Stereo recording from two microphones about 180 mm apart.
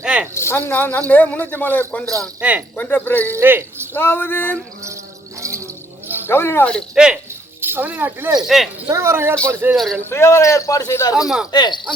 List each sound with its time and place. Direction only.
0.0 s a sound: 5° right (ahead or behind)
0.3 s speech: 15° left (ahead or behind)
2.4 s a woman's voice: 10° right (ahead or behind)
2.7 s speech: 10° left (ahead or behind)
3.3 s speech: 10° right (ahead or behind)
3.9 s speech: 10° left (ahead or behind)
5.4 s a sound: 15° right (ahead or behind)
6.2 s speech: 15° left (ahead or behind)
8.9 s a woman's voice: 15° right (ahead or behind)
9.7 s speech: centre (ahead or behind)
10.1 s speech: 15° left (ahead or behind)